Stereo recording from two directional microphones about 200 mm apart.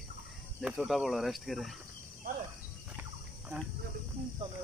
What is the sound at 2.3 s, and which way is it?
Cricket, 45° right (ahead or behind).